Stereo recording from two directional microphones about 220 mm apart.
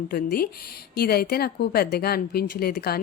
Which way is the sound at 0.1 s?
40° left (ahead or behind).